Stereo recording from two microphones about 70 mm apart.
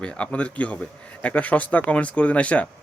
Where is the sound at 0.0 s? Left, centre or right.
Centre.